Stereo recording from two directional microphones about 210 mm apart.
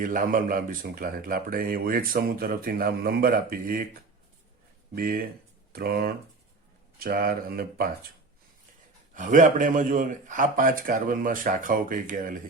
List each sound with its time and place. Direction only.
0.0 s speech: 40° right (ahead or behind)
4.9 s speech: 45° right (ahead or behind)
9.1 s a man's voice: 40° right (ahead or behind)